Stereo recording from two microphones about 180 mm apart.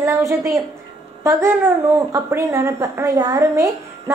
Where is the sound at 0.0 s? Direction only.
15° right (ahead or behind).